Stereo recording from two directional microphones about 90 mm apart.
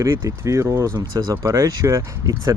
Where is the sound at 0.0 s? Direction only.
35° right (ahead or behind).